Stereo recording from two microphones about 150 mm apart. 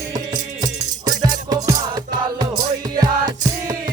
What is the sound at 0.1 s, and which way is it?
Music, 25° right (ahead or behind).